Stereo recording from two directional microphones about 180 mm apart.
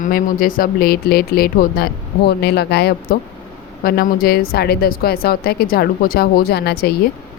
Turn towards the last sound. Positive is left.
turn(degrees=60)  # may be behind; listen again after turning